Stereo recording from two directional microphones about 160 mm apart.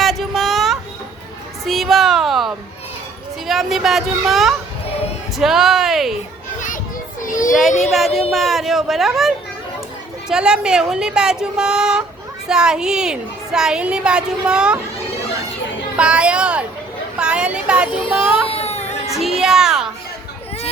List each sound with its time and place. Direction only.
0.0 s a sound: centre (ahead or behind)
3.4 s a woman's voice: centre (ahead or behind)
7.2 s child singing: 55° left (ahead or behind)
7.7 s speech: 45° left (ahead or behind)
7.9 s a woman's voice: centre (ahead or behind)
16.0 s a sound: 5° right (ahead or behind)
17.2 s speech: 5° right (ahead or behind)
18.5 s a sound: 40° left (ahead or behind)
19.1 s a woman's voice: centre (ahead or behind)